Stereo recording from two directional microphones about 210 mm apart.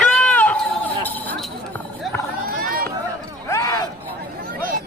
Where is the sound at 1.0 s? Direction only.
10° left (ahead or behind).